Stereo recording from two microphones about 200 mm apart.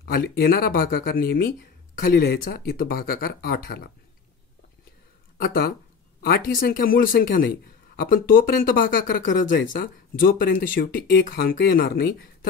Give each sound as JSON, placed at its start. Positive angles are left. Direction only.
{"t": 0.0, "sound": "speech", "side_deg": 50}
{"t": 5.4, "sound": "speech", "side_deg": 50}